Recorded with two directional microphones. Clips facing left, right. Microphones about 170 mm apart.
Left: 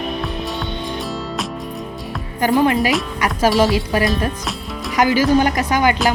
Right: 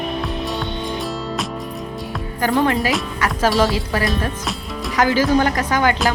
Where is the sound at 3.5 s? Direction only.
Centre (ahead or behind).